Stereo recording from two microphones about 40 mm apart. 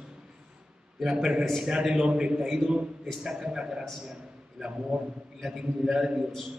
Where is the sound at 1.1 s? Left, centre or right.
Right.